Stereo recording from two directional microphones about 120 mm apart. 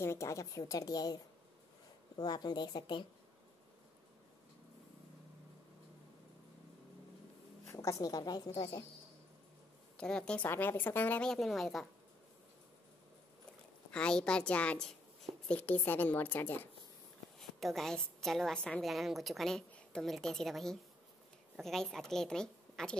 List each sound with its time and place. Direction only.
0.0 s a woman's voice: 25° left (ahead or behind); by 3.1 s 40° left (ahead or behind)
7.7 s a woman's voice: 25° left (ahead or behind)
9.9 s a woman's voice: 5° left (ahead or behind)
13.9 s a woman's voice: 10° left (ahead or behind)
17.4 s a woman's voice: centre (ahead or behind)